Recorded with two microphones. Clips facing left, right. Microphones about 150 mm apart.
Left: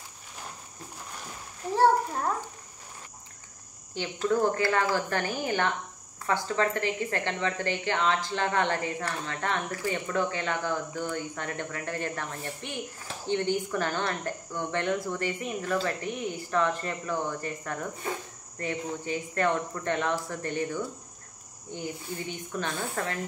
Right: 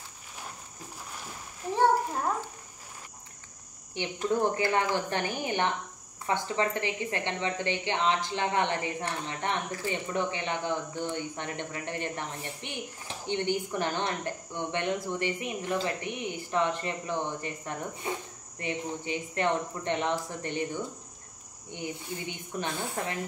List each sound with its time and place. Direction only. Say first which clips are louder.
3.9 s speech: left 2 dB; 20° right (ahead or behind)